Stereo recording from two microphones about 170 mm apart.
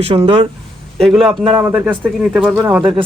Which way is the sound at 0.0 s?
35° right (ahead or behind).